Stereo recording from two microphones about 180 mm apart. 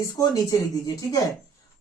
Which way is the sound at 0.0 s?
15° left (ahead or behind).